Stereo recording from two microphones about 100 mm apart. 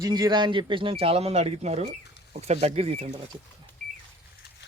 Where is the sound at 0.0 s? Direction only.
40° right (ahead or behind); by 3.2 s 90° right.